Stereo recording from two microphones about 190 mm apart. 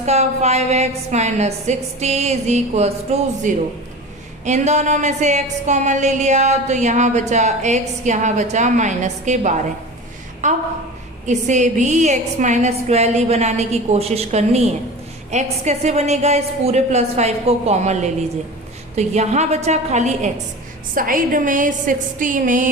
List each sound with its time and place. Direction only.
0.0 s a woman's voice: 35° right (ahead or behind)